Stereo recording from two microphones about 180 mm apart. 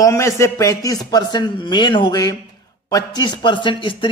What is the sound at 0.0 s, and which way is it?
A man's voice, 15° left (ahead or behind).